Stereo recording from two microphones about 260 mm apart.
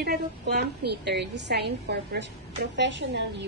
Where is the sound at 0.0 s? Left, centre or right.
Right.